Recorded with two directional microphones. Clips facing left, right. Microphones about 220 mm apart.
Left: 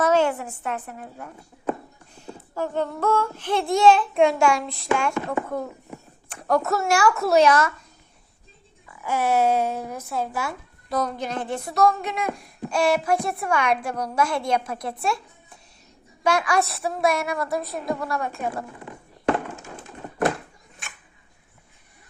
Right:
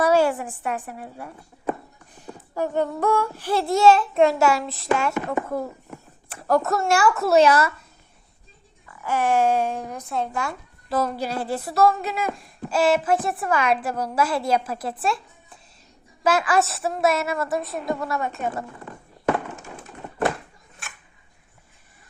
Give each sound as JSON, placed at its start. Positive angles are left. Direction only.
{"t": 0.0, "sound": "a woman's voice", "side_deg": -10}
{"t": 8.9, "sound": "speech", "side_deg": 10}
{"t": 18.9, "sound": "a sound", "side_deg": 15}